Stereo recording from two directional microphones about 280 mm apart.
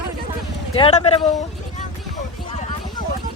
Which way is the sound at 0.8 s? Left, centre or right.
Left.